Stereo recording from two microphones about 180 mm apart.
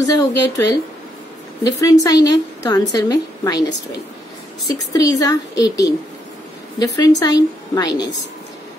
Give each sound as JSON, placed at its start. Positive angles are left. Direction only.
{"t": 0.0, "sound": "a woman's voice", "side_deg": 20}
{"t": 4.9, "sound": "a woman's voice", "side_deg": 20}